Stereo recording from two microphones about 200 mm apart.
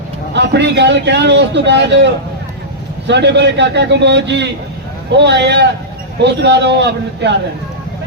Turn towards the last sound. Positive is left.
turn(degrees=-60)  # may be behind; listen again after turning